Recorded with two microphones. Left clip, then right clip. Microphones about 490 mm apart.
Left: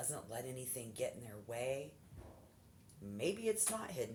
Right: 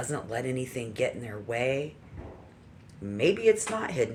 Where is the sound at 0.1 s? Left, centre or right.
Left.